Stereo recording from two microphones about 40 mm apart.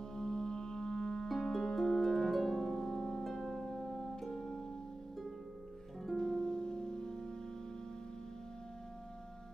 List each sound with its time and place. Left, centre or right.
0.1 s music: centre
1.3 s harp: centre
6.1 s music: centre